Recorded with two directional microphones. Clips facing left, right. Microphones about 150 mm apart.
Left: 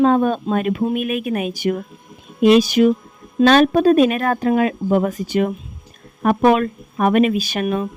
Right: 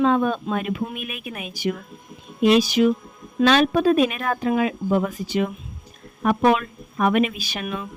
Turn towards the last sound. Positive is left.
turn(degrees=45)  # may be behind; listen again after turning